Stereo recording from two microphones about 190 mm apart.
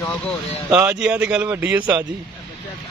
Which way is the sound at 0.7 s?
10° right (ahead or behind).